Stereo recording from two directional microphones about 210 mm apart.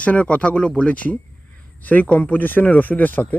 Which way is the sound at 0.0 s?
5° left (ahead or behind).